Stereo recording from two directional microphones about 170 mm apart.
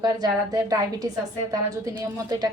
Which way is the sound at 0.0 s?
20° right (ahead or behind).